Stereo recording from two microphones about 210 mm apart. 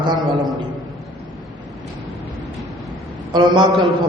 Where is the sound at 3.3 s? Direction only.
20° right (ahead or behind).